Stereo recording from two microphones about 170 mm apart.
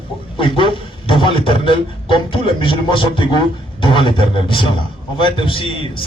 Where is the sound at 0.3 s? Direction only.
30° left (ahead or behind).